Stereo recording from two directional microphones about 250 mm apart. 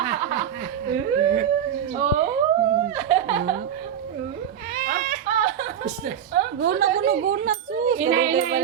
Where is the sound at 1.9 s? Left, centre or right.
Right.